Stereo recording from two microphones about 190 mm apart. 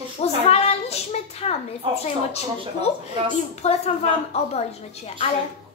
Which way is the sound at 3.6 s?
35° left (ahead or behind).